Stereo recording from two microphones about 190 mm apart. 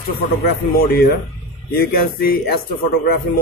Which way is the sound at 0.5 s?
55° left (ahead or behind).